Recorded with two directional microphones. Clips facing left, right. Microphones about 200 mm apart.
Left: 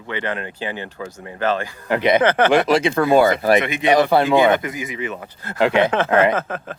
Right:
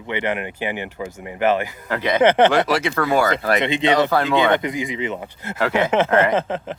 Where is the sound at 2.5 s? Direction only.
20° left (ahead or behind).